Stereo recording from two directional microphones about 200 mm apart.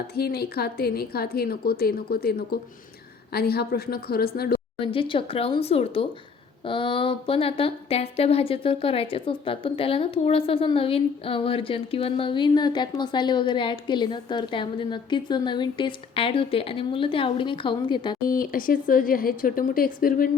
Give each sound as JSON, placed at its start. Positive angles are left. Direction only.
{"t": 0.2, "sound": "speech", "side_deg": 50}
{"t": 4.8, "sound": "a woman's voice", "side_deg": 25}
{"t": 18.3, "sound": "speech", "side_deg": 45}